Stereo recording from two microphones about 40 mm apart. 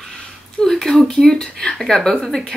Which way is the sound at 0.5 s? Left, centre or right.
Centre.